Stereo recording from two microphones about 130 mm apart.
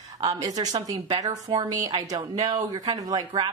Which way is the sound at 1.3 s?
45° right (ahead or behind).